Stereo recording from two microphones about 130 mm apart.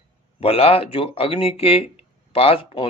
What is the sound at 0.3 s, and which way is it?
Speech, 50° left (ahead or behind).